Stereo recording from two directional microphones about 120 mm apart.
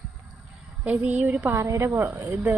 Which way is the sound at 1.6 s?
25° right (ahead or behind).